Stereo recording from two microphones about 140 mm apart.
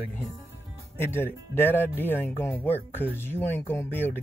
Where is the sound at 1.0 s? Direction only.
15° left (ahead or behind).